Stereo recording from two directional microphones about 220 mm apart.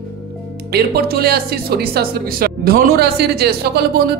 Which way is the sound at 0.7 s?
45° right (ahead or behind).